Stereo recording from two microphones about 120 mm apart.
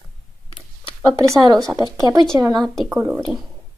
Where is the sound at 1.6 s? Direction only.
30° right (ahead or behind).